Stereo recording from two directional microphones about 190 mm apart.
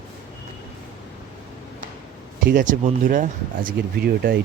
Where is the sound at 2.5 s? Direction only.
45° right (ahead or behind).